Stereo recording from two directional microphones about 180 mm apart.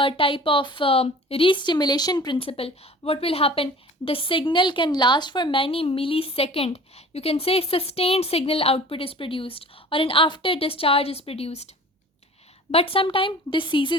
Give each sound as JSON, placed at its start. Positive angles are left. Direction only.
{"t": 0.0, "sound": "a woman's voice", "side_deg": 30}
{"t": 12.7, "sound": "speech", "side_deg": 30}